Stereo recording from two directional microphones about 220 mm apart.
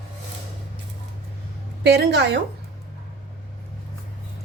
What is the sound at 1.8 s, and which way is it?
Speech, 50° right (ahead or behind).